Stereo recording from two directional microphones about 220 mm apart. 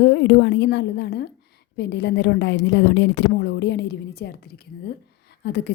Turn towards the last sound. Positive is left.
turn(degrees=50)  # may be behind; listen again after turning